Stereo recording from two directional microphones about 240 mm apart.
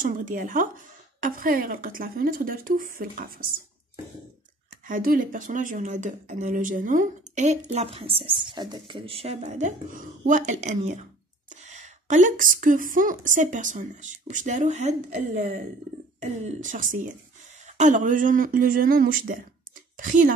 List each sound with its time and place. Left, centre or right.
0.0 s speech: right
4.8 s speech: right